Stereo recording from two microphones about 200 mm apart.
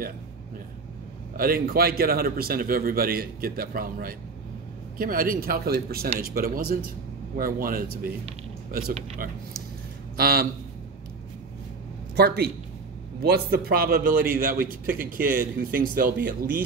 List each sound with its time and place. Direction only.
1.3 s a man's voice: 45° right (ahead or behind)
12.2 s a man's voice: 55° right (ahead or behind)